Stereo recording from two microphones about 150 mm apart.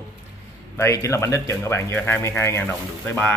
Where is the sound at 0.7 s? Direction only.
20° left (ahead or behind).